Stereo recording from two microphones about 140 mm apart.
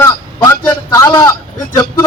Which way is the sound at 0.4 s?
20° left (ahead or behind).